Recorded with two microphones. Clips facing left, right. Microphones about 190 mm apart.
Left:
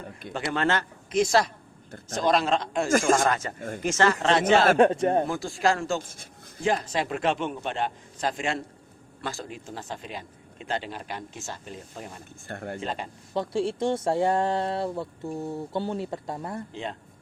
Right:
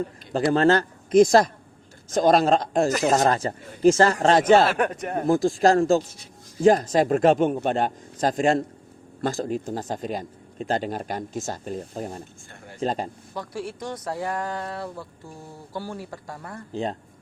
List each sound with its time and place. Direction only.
0.3 s a man's voice: 35° right (ahead or behind)
4.8 s speech: 25° left (ahead or behind)
5.2 s speech: 40° right (ahead or behind)
6.0 s a man's voice: 50° left (ahead or behind)
6.6 s a man's voice: 45° right (ahead or behind)
12.5 s speech: 60° left (ahead or behind)
12.8 s speech: 40° right (ahead or behind)
13.3 s speech: 25° left (ahead or behind)
16.7 s speech: 40° right (ahead or behind)